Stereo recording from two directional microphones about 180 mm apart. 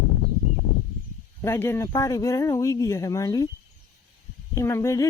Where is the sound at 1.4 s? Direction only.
15° left (ahead or behind).